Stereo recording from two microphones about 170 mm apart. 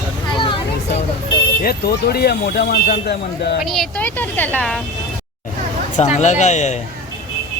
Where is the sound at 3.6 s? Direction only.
Centre (ahead or behind).